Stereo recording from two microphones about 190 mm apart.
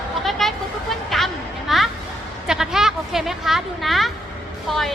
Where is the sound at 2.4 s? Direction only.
5° right (ahead or behind).